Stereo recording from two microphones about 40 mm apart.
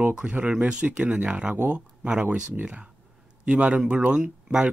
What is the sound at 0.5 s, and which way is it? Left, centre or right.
Speech, right.